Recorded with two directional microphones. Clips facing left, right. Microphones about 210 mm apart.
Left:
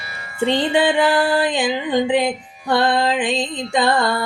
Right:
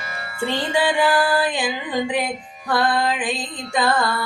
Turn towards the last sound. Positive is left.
turn(degrees=25)  # may be behind; listen again after turning